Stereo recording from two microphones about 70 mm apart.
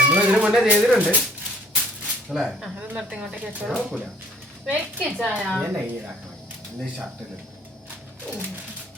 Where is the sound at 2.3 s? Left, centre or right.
Centre.